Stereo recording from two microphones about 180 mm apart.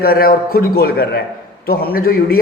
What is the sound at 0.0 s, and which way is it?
A man's voice, 55° left (ahead or behind).